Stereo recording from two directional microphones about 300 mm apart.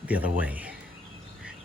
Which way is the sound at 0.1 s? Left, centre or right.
Centre.